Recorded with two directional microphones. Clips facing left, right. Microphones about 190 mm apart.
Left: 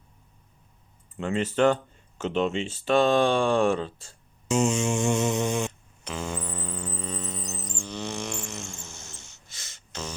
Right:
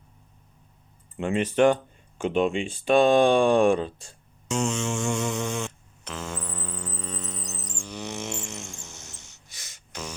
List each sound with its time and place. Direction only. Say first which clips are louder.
1.1 s speech: right 2 dB; 15° right (ahead or behind)
4.4 s mantra: left 3 dB; 5° left (ahead or behind)
6.1 s mantra: left 2 dB; centre (ahead or behind)
7.9 s a sound: even; 20° right (ahead or behind)